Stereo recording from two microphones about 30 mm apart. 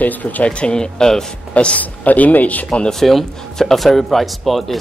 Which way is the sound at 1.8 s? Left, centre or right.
Left.